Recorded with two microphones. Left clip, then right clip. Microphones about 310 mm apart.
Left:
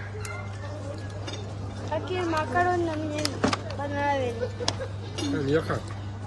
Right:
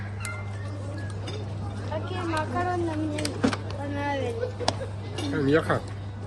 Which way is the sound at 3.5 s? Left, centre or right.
Left.